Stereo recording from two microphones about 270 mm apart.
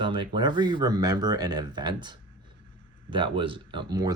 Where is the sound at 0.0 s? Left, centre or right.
Centre.